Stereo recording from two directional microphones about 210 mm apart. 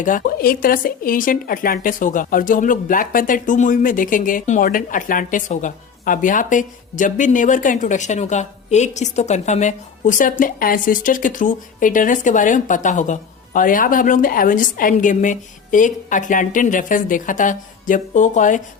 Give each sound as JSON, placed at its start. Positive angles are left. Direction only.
{"t": 0.0, "sound": "speech", "side_deg": 40}